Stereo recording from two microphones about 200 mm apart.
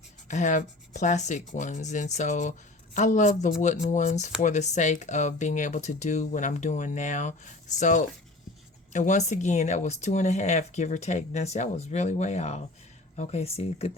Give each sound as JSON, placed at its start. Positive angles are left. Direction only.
{"t": 0.3, "sound": "speech", "side_deg": 35}